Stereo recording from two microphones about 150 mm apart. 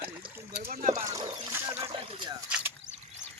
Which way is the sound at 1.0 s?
25° right (ahead or behind).